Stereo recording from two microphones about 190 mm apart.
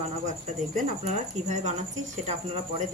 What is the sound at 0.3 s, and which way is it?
Speech, 40° right (ahead or behind).